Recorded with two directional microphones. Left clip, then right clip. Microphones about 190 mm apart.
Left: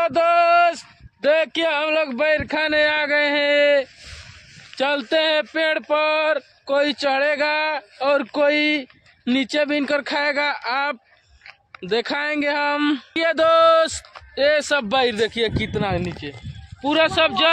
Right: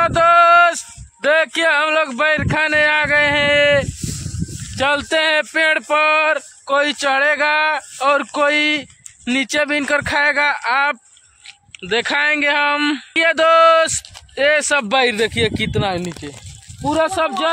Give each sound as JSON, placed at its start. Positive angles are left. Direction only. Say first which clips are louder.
{"t": 0.0, "sound": "a sound", "louder": "right 5 dB", "side_deg": -5}
{"t": 4.7, "sound": "speech", "louder": "right 3 dB", "side_deg": 0}
{"t": 15.0, "sound": "a man's voice", "louder": "right 4 dB", "side_deg": -45}
{"t": 16.8, "sound": "speech", "louder": "right 1 dB", "side_deg": -40}
{"t": 17.2, "sound": "speech", "louder": "left 1 dB", "side_deg": -15}